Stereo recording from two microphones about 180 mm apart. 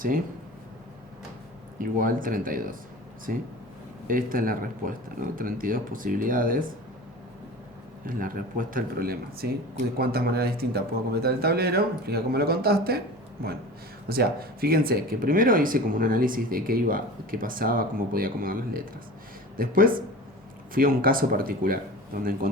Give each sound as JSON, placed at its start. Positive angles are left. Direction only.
{"t": 1.8, "sound": "speech", "side_deg": -50}
{"t": 8.0, "sound": "speech", "side_deg": -50}
{"t": 14.1, "sound": "speech", "side_deg": -55}